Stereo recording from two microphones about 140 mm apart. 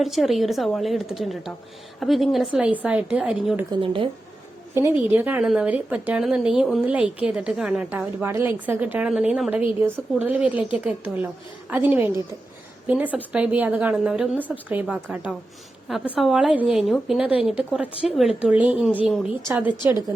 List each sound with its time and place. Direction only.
0.0 s a woman's voice: centre (ahead or behind)
3.8 s speech: 40° right (ahead or behind)
4.7 s a woman's voice: 15° right (ahead or behind)
19.5 s a woman's voice: 15° right (ahead or behind)